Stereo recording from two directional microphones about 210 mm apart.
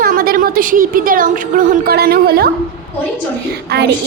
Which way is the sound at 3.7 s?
50° right (ahead or behind).